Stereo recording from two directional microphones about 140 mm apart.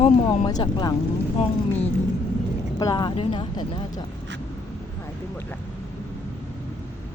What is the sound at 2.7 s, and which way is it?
Speech, 30° left (ahead or behind).